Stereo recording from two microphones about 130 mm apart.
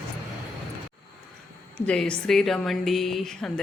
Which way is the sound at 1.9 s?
5° left (ahead or behind).